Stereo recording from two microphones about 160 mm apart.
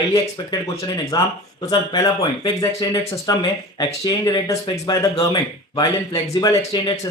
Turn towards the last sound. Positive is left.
turn(degrees=30)  # may be behind; listen again after turning